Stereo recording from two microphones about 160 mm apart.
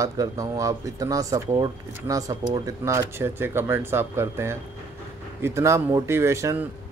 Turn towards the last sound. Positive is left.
turn(degrees=-15)  # may be behind; listen again after turning